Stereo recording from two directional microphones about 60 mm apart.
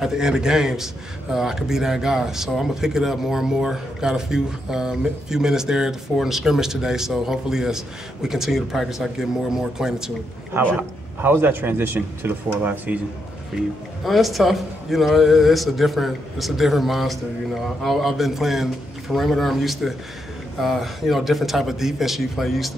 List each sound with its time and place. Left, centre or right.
0.0 s speech: centre
10.6 s a man's voice: right
11.1 s a man's voice: right
12.6 s speech: right
13.5 s speech: centre
14.0 s speech: centre